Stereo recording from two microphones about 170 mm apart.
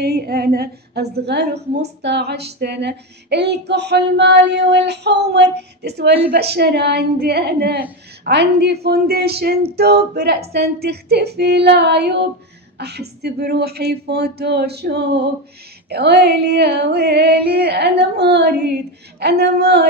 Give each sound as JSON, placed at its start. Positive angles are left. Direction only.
{"t": 0.0, "sound": "a woman's voice", "side_deg": -70}
{"t": 8.2, "sound": "speech", "side_deg": -85}
{"t": 8.8, "sound": "speech", "side_deg": -65}